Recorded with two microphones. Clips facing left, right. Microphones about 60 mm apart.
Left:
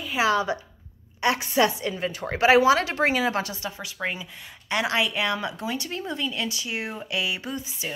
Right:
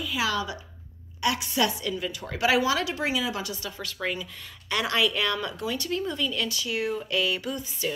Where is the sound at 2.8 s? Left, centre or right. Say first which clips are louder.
Left 4 dB; left.